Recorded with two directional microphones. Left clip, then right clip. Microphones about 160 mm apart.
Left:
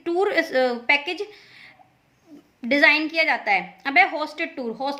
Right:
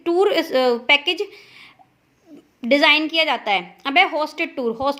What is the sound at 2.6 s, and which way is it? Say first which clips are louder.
A woman's voice: right 2 dB; 30° right (ahead or behind).